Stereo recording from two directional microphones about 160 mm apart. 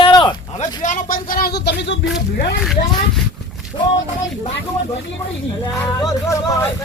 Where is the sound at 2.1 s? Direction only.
90° left.